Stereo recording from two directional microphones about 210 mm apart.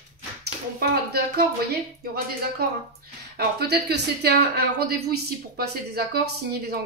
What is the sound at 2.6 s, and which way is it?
A woman's voice, 50° right (ahead or behind).